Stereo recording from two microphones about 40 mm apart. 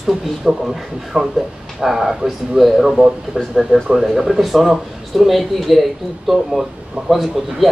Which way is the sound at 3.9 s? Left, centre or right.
Centre.